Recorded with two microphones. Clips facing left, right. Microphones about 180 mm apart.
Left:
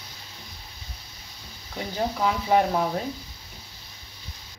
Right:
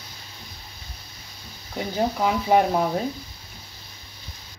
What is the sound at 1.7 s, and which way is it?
Speech, 20° right (ahead or behind).